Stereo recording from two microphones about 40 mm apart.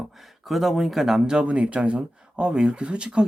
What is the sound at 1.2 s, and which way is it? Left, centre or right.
Speech, right.